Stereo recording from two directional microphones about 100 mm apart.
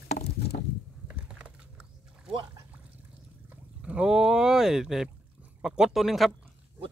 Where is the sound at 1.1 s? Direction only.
10° right (ahead or behind).